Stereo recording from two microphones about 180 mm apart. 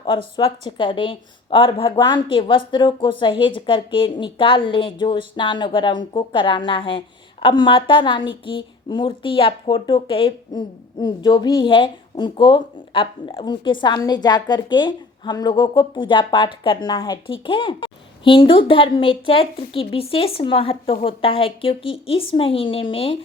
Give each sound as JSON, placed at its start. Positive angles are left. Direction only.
{"t": 0.3, "sound": "a woman's voice", "side_deg": 25}